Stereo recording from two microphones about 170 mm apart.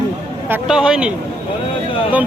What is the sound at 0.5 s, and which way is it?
Speech, 5° right (ahead or behind).